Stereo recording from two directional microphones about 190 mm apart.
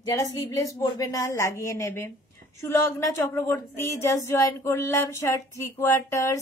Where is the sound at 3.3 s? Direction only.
15° left (ahead or behind).